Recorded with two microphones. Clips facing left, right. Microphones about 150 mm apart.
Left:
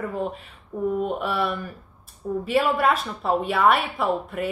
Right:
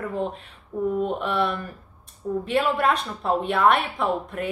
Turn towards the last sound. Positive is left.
turn(degrees=0)  # may be behind; listen again after turning